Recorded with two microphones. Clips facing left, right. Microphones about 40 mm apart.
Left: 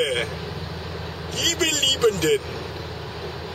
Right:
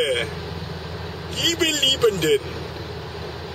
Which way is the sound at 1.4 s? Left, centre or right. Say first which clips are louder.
Right 2 dB; centre.